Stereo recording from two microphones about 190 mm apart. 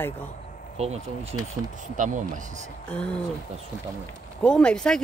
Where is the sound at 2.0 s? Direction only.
45° right (ahead or behind).